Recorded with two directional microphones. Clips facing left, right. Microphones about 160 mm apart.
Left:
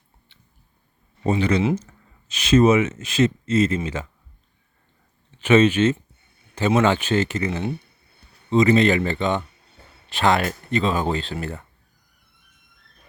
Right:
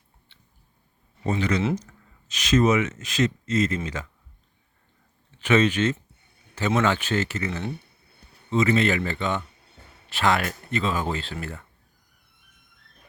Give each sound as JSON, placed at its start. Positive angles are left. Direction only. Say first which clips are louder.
{"t": 1.2, "sound": "speech", "louder": "left 4 dB", "side_deg": 25}
{"t": 5.5, "sound": "speech", "louder": "left 5 dB", "side_deg": 25}